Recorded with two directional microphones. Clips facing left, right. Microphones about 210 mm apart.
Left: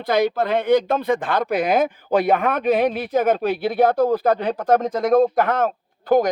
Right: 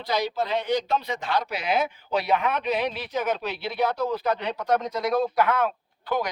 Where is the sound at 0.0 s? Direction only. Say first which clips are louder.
Left 7 dB; 55° left (ahead or behind).